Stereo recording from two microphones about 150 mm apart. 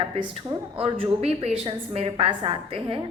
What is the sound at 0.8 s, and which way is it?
A woman's voice, 40° right (ahead or behind).